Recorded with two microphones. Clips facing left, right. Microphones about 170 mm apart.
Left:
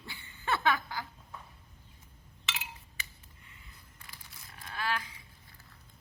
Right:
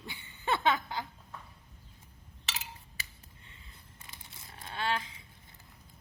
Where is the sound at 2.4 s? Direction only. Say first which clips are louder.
Left 1 dB; 40° right (ahead or behind).